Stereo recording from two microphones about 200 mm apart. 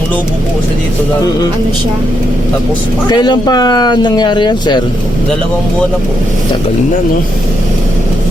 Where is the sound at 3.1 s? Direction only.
20° left (ahead or behind).